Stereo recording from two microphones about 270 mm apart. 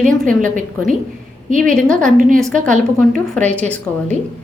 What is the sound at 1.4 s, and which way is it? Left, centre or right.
Speech, right.